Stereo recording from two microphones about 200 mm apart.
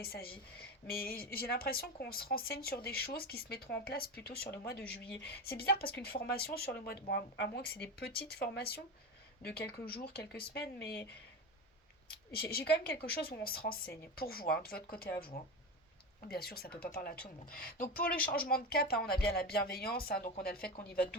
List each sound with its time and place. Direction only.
0.0 s a woman's voice: 50° left (ahead or behind)
12.3 s a woman's voice: 50° left (ahead or behind)